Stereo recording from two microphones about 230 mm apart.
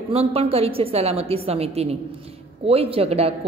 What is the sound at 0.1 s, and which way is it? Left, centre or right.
Speech, right.